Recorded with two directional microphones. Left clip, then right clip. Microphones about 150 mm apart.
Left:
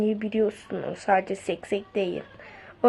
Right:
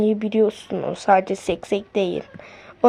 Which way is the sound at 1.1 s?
45° right (ahead or behind).